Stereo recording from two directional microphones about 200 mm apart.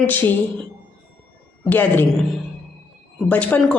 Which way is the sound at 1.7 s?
10° left (ahead or behind).